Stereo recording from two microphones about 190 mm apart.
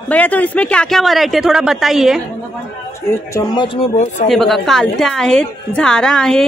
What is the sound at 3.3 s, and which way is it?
Speech, 25° left (ahead or behind).